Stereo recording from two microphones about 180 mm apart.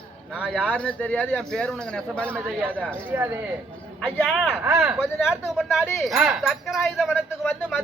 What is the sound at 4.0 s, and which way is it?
Speech, centre (ahead or behind).